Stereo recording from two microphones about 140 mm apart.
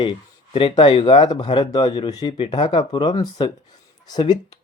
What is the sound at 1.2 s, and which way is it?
Speech, 30° left (ahead or behind).